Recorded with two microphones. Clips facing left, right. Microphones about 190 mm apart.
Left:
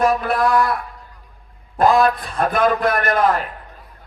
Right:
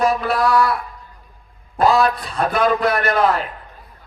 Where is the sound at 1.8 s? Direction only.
50° left (ahead or behind).